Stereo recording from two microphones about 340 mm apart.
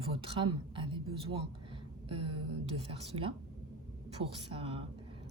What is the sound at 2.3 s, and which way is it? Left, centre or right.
Speech, right.